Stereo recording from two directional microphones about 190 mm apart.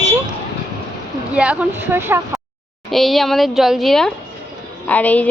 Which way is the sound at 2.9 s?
Centre (ahead or behind).